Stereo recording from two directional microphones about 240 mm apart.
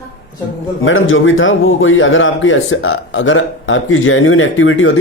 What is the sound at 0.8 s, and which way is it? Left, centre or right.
A man's voice, left.